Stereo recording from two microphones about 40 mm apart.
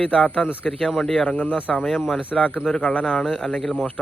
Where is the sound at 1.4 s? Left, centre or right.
Left.